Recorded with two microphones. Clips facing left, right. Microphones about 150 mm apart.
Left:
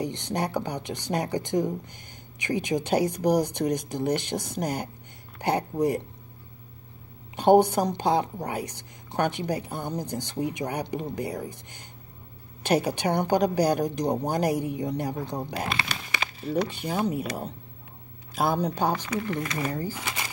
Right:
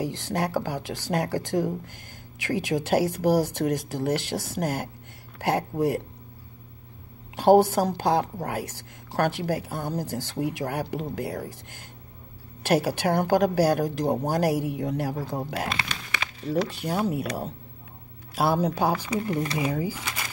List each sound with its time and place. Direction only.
0.0 s a woman's voice: 5° right (ahead or behind)
7.3 s a woman's voice: centre (ahead or behind)
19.3 s speech: 30° right (ahead or behind)
19.6 s speech: 10° right (ahead or behind)
20.0 s shuffling cards: 10° left (ahead or behind)